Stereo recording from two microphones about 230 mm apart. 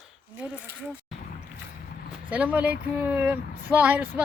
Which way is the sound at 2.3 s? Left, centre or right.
Centre.